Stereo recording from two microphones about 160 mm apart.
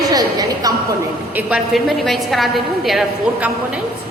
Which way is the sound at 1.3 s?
10° right (ahead or behind).